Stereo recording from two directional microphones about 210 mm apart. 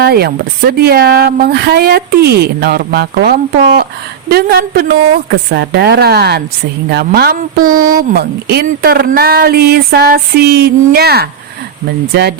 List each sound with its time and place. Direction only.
0.0 s speech: 50° right (ahead or behind)